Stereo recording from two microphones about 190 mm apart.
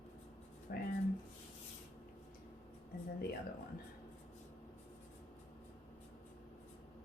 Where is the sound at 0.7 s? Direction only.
55° left (ahead or behind).